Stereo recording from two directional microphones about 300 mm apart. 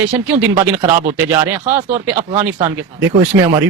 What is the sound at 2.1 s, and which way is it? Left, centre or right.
Speech, right.